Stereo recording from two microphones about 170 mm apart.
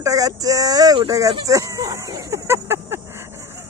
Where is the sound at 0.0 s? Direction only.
20° right (ahead or behind).